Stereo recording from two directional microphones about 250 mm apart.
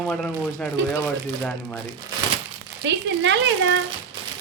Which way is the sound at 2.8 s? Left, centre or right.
Right.